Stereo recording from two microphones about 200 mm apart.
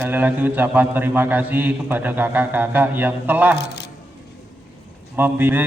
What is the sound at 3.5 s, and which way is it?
Speech, 55° left (ahead or behind).